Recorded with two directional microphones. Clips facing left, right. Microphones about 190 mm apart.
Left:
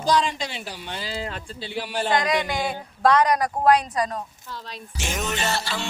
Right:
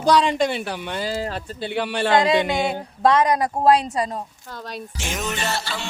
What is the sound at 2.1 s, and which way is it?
A woman's voice, 25° right (ahead or behind).